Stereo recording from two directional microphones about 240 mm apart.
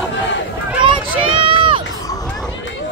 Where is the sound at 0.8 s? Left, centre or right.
Right.